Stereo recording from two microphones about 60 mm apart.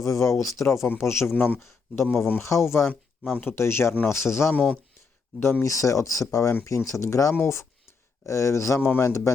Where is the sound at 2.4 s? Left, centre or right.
Left.